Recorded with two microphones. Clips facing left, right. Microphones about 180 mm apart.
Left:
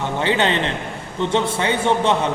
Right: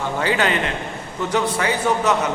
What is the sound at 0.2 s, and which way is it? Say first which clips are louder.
A man's voice: left 1 dB; 25° left (ahead or behind).